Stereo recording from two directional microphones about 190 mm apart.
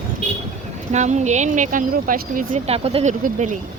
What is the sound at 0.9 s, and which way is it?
Speech, 40° right (ahead or behind).